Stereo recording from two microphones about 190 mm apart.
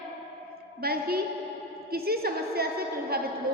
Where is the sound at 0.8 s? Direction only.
55° right (ahead or behind).